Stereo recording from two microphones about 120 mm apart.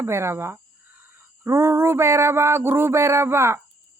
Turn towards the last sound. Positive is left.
turn(degrees=-20)  # may be behind; listen again after turning